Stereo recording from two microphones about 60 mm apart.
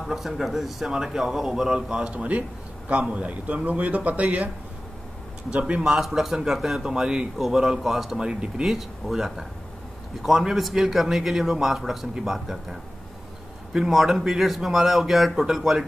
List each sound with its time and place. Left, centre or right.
0.0 s a man's voice: centre; by 4.5 s right
5.5 s a man's voice: right
5.9 s a man's voice: centre
13.7 s a man's voice: centre